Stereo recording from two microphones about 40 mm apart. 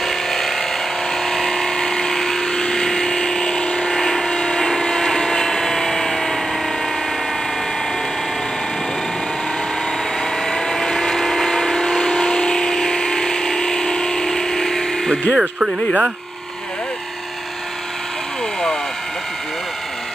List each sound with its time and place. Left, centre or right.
0.0 s a sound: centre
3.6 s vehicle: left
4.0 s vehicle: centre
4.3 s vehicle: left
10.4 s vehicle: centre
12.2 s a sound: centre
15.3 s speech: centre